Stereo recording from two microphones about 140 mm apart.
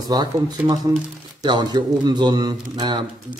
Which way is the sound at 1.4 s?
30° right (ahead or behind).